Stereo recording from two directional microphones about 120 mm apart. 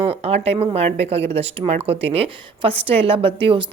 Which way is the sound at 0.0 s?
55° right (ahead or behind).